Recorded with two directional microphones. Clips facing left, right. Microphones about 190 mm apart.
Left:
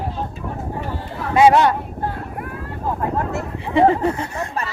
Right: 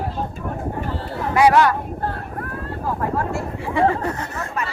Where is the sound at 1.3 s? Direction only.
25° left (ahead or behind).